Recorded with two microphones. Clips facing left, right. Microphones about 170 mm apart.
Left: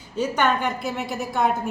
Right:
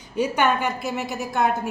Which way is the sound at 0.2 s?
10° right (ahead or behind).